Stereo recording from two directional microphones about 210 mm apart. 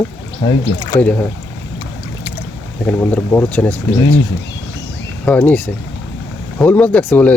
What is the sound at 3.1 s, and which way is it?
Speech, 10° left (ahead or behind).